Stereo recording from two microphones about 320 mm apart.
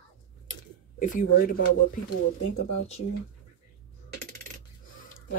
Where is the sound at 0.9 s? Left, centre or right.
Left.